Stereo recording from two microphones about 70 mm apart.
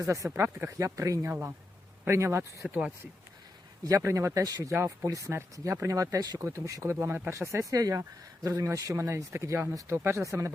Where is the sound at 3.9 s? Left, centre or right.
Right.